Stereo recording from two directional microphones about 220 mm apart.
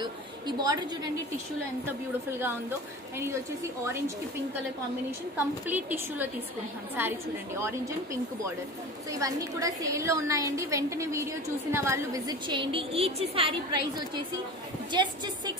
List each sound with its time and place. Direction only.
0.0 s a woman's voice: 20° right (ahead or behind)
5.7 s a woman's voice: 10° right (ahead or behind)
9.2 s a woman's voice: 15° right (ahead or behind)